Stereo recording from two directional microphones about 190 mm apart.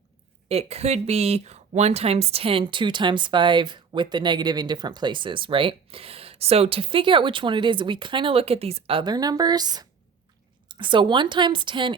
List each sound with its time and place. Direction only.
0.4 s speech: 30° right (ahead or behind)